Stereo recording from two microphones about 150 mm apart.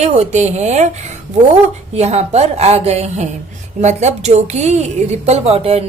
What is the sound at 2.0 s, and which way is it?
A woman's voice, 45° right (ahead or behind).